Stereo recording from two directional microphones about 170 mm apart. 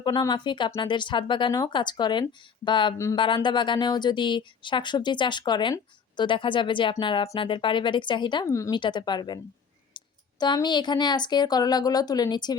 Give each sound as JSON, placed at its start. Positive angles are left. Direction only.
{"t": 0.0, "sound": "speech", "side_deg": 25}
{"t": 10.0, "sound": "a sound", "side_deg": 30}
{"t": 10.4, "sound": "speech", "side_deg": 25}